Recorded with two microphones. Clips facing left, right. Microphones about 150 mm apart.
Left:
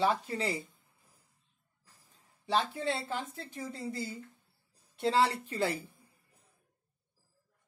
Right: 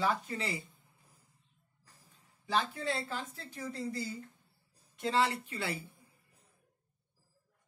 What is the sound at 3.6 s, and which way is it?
Speech, centre (ahead or behind).